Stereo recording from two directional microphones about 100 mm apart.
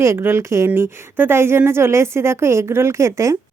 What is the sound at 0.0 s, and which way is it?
A woman's voice, 25° right (ahead or behind).